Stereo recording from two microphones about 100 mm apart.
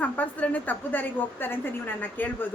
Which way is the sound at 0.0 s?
15° left (ahead or behind).